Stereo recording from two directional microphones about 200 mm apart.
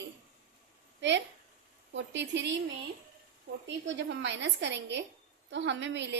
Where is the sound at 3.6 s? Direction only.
60° right (ahead or behind).